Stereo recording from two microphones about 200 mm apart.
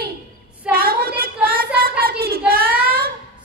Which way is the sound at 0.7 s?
50° right (ahead or behind).